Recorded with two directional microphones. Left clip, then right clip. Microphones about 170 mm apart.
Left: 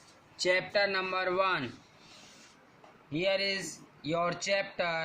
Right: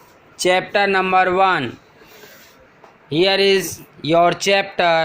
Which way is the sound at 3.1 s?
45° right (ahead or behind).